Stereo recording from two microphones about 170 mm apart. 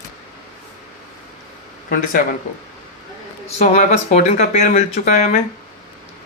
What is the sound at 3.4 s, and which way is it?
Speech, 40° left (ahead or behind).